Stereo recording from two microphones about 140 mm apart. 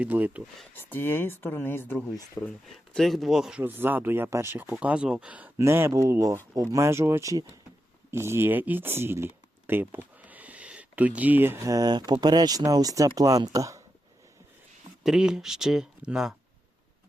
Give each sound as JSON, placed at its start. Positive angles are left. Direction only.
{"t": 0.0, "sound": "speech", "side_deg": -10}
{"t": 0.7, "sound": "speech", "side_deg": 15}
{"t": 3.6, "sound": "speech", "side_deg": -15}
{"t": 15.0, "sound": "speech", "side_deg": -5}